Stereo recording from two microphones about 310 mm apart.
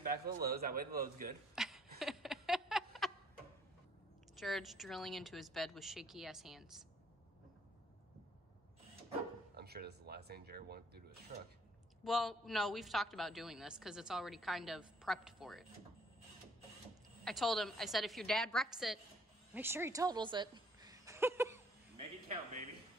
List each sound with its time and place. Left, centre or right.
0.0 s a man's voice: right
1.5 s a sound: centre
4.4 s a woman's voice: centre
9.6 s speech: right
12.0 s a woman's voice: centre
17.2 s a woman's voice: centre
21.9 s a sound: right